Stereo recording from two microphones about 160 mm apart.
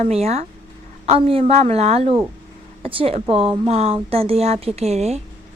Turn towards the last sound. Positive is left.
turn(degrees=-40)  # may be behind; listen again after turning